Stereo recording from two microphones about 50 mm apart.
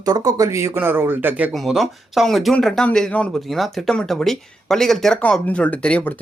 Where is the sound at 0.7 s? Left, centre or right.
Right.